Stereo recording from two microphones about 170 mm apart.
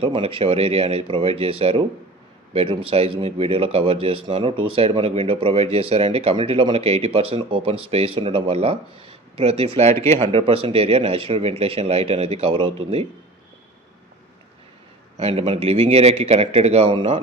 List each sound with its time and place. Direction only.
0.0 s speech: 35° right (ahead or behind)
15.2 s speech: 35° right (ahead or behind)